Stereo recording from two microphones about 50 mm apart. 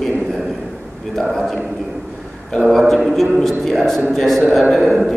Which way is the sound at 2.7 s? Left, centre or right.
Centre.